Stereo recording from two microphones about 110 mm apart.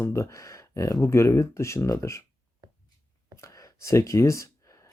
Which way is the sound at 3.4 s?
25° left (ahead or behind).